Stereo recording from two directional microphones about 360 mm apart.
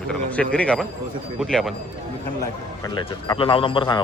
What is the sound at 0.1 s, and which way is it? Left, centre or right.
Speech, centre.